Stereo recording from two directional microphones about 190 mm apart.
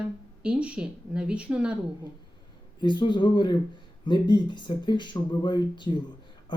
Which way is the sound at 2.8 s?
25° left (ahead or behind).